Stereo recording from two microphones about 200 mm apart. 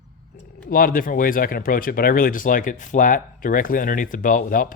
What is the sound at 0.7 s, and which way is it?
A man's voice, 45° left (ahead or behind).